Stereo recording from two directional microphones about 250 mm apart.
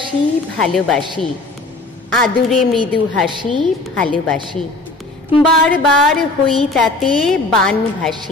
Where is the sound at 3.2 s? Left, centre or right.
Centre.